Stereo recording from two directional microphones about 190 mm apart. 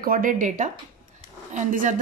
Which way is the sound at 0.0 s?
50° right (ahead or behind).